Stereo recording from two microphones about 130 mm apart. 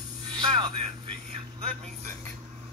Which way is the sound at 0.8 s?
45° right (ahead or behind).